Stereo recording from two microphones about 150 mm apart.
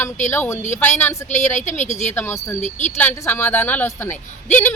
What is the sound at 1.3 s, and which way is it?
Speech, 50° left (ahead or behind).